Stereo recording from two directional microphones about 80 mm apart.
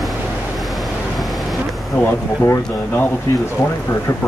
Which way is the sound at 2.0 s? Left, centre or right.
Left.